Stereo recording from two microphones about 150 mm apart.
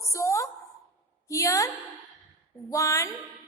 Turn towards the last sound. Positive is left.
turn(degrees=20)  # may be behind; listen again after turning